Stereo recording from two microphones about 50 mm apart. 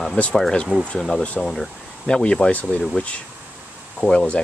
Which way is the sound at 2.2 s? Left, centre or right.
Left.